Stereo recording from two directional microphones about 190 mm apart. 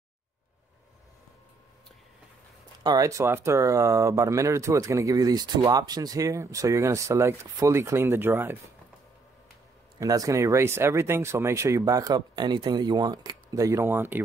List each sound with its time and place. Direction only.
2.8 s speech: 20° right (ahead or behind)
9.9 s speech: 20° right (ahead or behind)